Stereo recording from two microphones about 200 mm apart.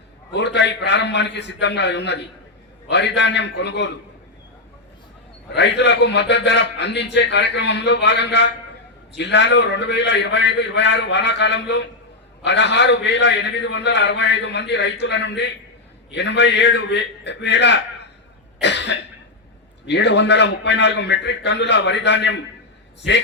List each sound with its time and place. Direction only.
0.3 s a man's voice: 60° left (ahead or behind)
5.5 s a man's voice: 60° left (ahead or behind)
18.6 s cough: 60° left (ahead or behind)
19.9 s a man's voice: 60° left (ahead or behind)